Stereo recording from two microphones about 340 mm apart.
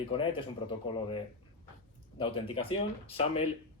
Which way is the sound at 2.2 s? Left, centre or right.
Centre.